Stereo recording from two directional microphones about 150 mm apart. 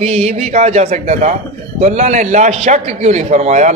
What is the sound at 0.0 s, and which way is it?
A man's voice, 45° right (ahead or behind).